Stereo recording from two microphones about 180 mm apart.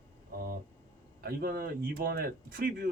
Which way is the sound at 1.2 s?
55° right (ahead or behind).